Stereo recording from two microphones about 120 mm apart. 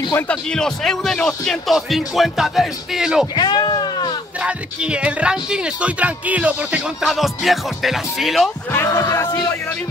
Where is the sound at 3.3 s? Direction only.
35° left (ahead or behind).